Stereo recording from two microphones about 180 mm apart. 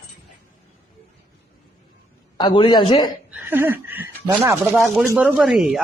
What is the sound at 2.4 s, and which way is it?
Speech, 25° left (ahead or behind).